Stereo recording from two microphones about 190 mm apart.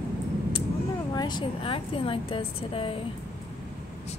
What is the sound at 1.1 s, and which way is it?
A woman's voice, 20° left (ahead or behind).